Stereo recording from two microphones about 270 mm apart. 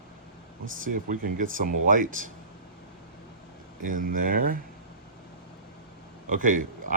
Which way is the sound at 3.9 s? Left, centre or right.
Right.